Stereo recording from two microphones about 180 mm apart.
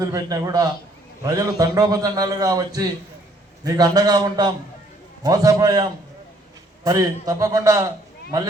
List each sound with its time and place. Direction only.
0.0 s a man's voice: 20° right (ahead or behind)